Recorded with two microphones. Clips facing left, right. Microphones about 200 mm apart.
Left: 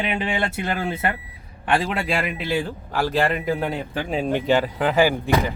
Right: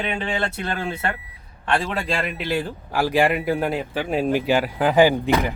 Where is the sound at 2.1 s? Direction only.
5° left (ahead or behind).